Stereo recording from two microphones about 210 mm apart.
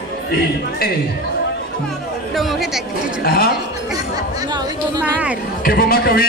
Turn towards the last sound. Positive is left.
turn(degrees=45)  # may be behind; listen again after turning